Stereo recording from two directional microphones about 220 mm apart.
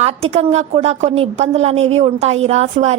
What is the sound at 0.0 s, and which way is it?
A woman's voice, 30° right (ahead or behind).